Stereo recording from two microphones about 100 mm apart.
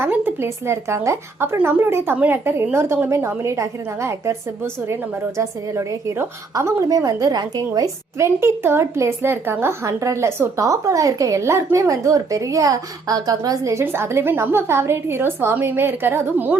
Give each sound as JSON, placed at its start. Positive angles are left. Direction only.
{"t": 0.0, "sound": "a woman's voice", "side_deg": -20}